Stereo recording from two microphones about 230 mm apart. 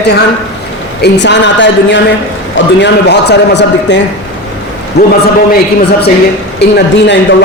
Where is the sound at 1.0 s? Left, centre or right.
Left.